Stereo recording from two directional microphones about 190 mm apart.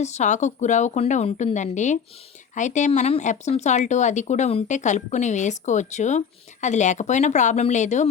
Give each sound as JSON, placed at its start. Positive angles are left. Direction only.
{"t": 0.0, "sound": "speech", "side_deg": 40}